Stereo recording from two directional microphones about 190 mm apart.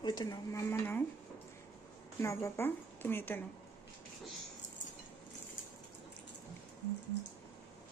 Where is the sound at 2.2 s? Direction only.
15° left (ahead or behind).